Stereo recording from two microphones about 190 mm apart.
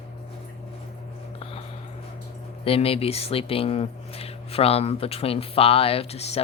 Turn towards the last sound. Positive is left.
turn(degrees=35)  # may be behind; listen again after turning